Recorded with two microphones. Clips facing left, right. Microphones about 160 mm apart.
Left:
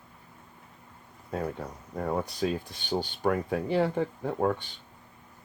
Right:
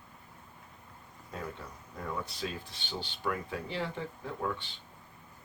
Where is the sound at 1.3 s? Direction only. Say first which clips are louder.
Left 9 dB; 45° left (ahead or behind).